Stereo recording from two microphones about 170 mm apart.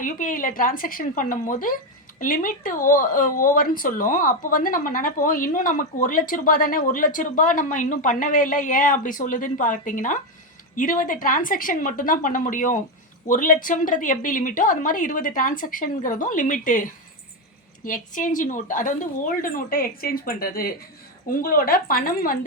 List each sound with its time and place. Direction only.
0.0 s speech: 50° left (ahead or behind)